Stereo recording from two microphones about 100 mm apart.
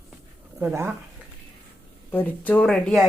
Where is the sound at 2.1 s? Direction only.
15° left (ahead or behind).